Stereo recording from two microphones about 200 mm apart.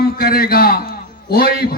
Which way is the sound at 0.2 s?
50° left (ahead or behind).